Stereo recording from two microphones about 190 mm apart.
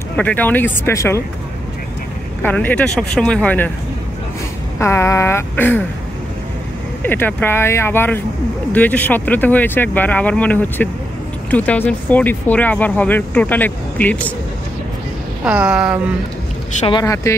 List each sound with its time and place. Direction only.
0.1 s speech: 10° left (ahead or behind)
2.4 s speech: 10° left (ahead or behind)
4.7 s speech: 15° left (ahead or behind)
7.0 s speech: 10° left (ahead or behind)
15.4 s speech: 5° right (ahead or behind)
17.0 s speech: 15° left (ahead or behind)